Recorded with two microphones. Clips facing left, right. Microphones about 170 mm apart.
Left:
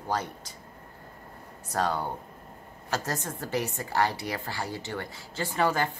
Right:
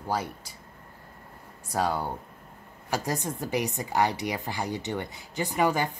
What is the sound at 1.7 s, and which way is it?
A woman's voice, 10° right (ahead or behind).